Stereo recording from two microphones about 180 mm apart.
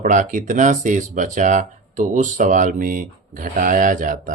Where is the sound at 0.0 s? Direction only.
45° right (ahead or behind).